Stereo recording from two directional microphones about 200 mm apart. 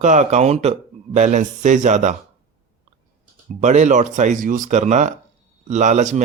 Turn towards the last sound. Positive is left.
turn(degrees=-35)  # may be behind; listen again after turning